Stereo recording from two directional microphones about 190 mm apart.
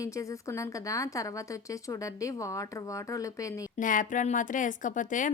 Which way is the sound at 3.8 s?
45° left (ahead or behind).